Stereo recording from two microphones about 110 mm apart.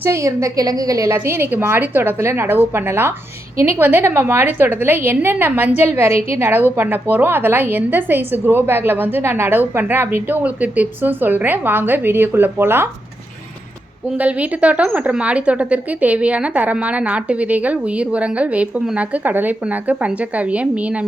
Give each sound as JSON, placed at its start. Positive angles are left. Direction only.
{"t": 0.0, "sound": "a woman's voice", "side_deg": -25}
{"t": 14.2, "sound": "a woman's voice", "side_deg": -15}